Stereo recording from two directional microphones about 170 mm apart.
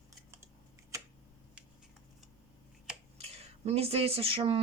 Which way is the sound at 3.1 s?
35° right (ahead or behind).